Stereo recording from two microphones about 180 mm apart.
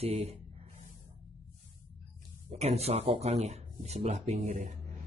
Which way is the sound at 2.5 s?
35° right (ahead or behind).